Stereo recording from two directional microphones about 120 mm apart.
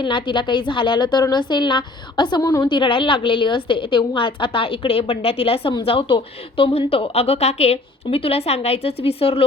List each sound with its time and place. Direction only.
0.0 s a woman's voice: 40° left (ahead or behind)